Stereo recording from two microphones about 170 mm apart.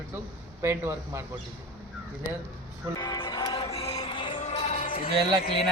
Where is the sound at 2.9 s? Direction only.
25° left (ahead or behind).